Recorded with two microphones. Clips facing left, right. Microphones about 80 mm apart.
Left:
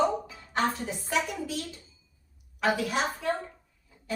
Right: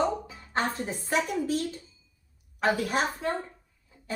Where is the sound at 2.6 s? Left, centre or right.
Right.